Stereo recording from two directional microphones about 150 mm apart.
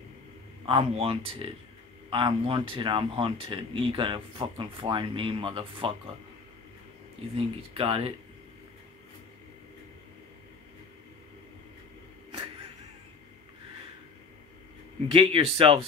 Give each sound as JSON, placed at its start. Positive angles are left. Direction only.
{"t": 0.7, "sound": "speech", "side_deg": -40}
{"t": 7.3, "sound": "speech", "side_deg": -40}
{"t": 15.0, "sound": "speech", "side_deg": -35}